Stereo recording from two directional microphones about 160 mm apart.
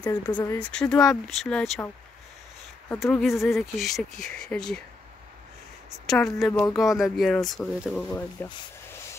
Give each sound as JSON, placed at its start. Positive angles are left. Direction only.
{"t": 0.0, "sound": "speech", "side_deg": 25}
{"t": 0.5, "sound": "speech", "side_deg": 5}
{"t": 3.0, "sound": "speech", "side_deg": 0}
{"t": 6.0, "sound": "speech", "side_deg": 0}